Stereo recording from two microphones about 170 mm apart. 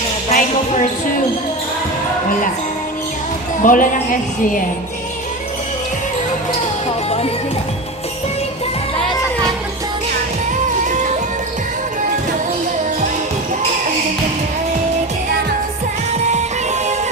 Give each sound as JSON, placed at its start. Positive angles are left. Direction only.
{"t": 0.3, "sound": "speech", "side_deg": 45}
{"t": 3.6, "sound": "a woman's voice", "side_deg": 50}